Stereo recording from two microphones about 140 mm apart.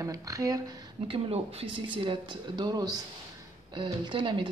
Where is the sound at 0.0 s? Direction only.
25° right (ahead or behind).